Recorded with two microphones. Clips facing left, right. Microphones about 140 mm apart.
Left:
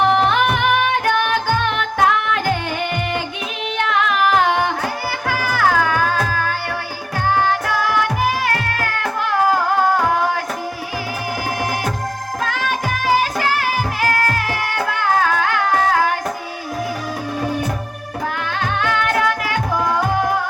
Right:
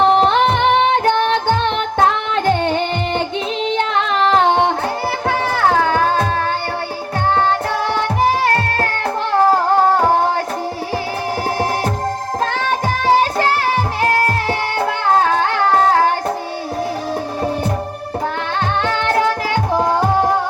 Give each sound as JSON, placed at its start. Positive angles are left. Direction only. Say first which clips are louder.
{"t": 0.0, "sound": "music", "louder": "right 3 dB", "side_deg": -25}
{"t": 3.7, "sound": "carnatic music", "louder": "left 1 dB", "side_deg": -25}
{"t": 5.3, "sound": "music", "louder": "right 1 dB", "side_deg": -25}
{"t": 12.4, "sound": "music", "louder": "right 2 dB", "side_deg": -30}
{"t": 18.8, "sound": "music", "louder": "right 2 dB", "side_deg": -30}